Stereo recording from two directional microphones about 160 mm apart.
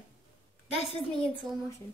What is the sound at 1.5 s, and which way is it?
Speech, 20° right (ahead or behind).